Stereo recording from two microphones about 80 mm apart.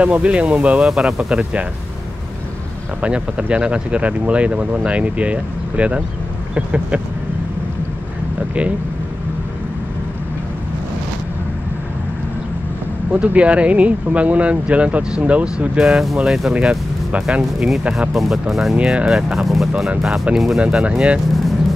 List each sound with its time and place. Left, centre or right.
0.0 s speech: centre
3.0 s speech: centre
13.1 s speech: centre
18.8 s speech: centre
19.0 s speech: centre
20.6 s speech: centre